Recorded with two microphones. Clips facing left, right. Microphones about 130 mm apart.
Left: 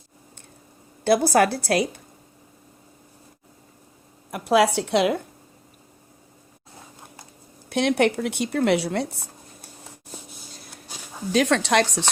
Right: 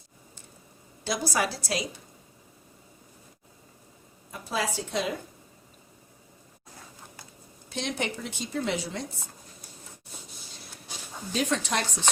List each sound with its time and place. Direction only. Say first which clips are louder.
1.0 s speech: left 11 dB; 60° left (ahead or behind)
4.3 s a woman's voice: left 12 dB; 75° left (ahead or behind)
7.7 s speech: left 12 dB; 65° left (ahead or behind)
11.3 s a woman's voice: left 8 dB; 75° left (ahead or behind)